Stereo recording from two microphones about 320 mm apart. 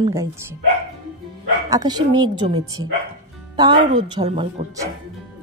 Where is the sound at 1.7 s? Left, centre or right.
Centre.